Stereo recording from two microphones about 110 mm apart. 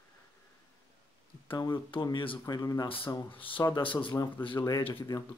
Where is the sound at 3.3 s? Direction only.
55° left (ahead or behind).